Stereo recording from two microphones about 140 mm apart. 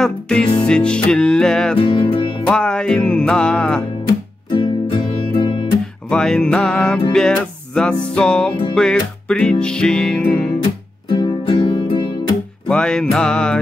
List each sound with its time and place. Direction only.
0.0 s music: 5° left (ahead or behind)
1.8 s music: 35° left (ahead or behind)
2.4 s music: 5° left (ahead or behind)
4.5 s music: 35° left (ahead or behind)
6.0 s music: 5° left (ahead or behind)
10.6 s music: 35° left (ahead or behind)
12.6 s music: 5° left (ahead or behind)